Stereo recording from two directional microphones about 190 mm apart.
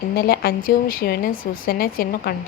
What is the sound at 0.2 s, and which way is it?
A woman's voice, 55° left (ahead or behind).